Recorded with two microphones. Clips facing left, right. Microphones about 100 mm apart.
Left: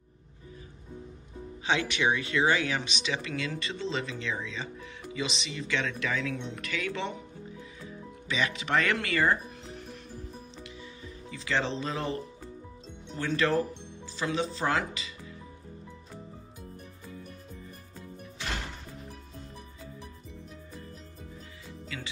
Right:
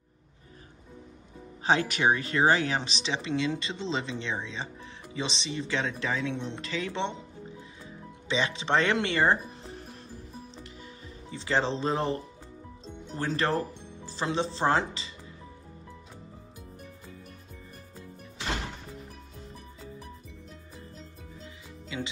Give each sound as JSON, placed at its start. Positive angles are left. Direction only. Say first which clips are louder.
{"t": 1.6, "sound": "speech", "louder": "right 3 dB", "side_deg": -40}
{"t": 10.5, "sound": "music", "louder": "left 1 dB", "side_deg": -35}
{"t": 13.1, "sound": "speech", "louder": "left 1 dB", "side_deg": -35}
{"t": 21.9, "sound": "music", "louder": "right 6 dB", "side_deg": -20}